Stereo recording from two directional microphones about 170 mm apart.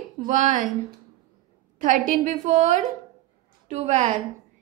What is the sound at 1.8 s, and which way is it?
A woman's voice, 50° right (ahead or behind).